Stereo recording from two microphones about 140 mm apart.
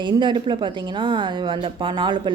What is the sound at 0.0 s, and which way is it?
A woman's voice, 35° right (ahead or behind).